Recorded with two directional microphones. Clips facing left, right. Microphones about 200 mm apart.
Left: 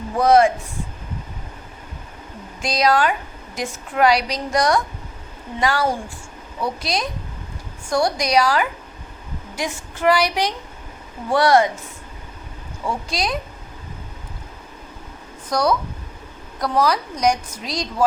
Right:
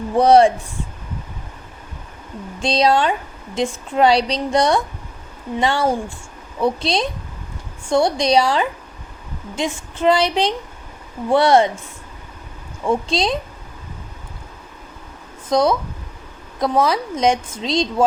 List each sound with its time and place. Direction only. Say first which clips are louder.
0.2 s speech: right 3 dB; 30° right (ahead or behind)
2.6 s a woman's voice: right 2 dB; 30° right (ahead or behind)
12.8 s a woman's voice: right 6 dB; 25° right (ahead or behind)
15.4 s a woman's voice: right 3 dB; 25° right (ahead or behind)